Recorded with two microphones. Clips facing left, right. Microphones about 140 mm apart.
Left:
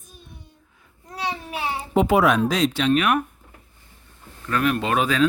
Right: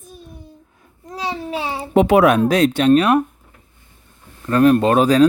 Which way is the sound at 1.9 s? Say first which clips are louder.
Right 5 dB; 65° right (ahead or behind).